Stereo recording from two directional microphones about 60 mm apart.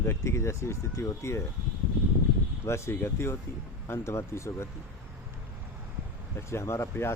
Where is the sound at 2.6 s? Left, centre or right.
Left.